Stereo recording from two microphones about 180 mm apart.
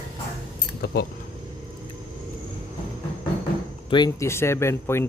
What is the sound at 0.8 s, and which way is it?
Speech, 60° left (ahead or behind).